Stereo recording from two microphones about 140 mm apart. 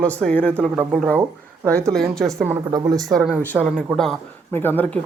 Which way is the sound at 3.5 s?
Centre (ahead or behind).